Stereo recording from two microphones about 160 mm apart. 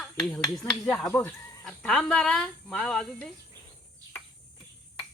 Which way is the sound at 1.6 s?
5° left (ahead or behind).